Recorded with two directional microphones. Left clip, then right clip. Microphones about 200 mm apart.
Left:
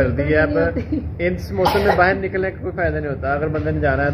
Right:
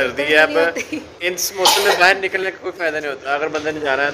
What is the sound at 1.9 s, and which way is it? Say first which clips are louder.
A man's voice: right 2 dB; 10° right (ahead or behind).